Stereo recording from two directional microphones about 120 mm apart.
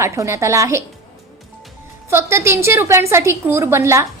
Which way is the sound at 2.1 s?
20° right (ahead or behind).